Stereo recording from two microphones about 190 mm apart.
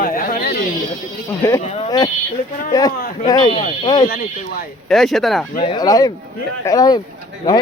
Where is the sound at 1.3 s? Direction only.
15° left (ahead or behind).